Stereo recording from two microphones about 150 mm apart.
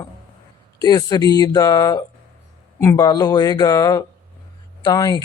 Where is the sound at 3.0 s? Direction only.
25° left (ahead or behind).